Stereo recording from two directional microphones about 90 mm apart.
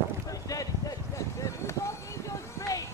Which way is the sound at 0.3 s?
40° left (ahead or behind).